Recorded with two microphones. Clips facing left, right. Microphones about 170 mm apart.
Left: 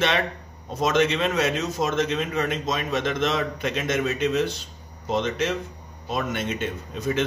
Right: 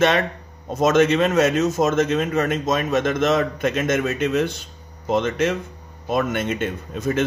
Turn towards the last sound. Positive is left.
turn(degrees=-50)  # may be behind; listen again after turning